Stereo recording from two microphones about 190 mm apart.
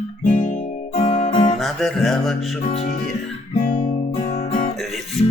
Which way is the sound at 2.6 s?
40° left (ahead or behind).